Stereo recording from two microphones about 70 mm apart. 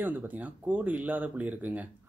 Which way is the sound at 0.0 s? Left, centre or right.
Right.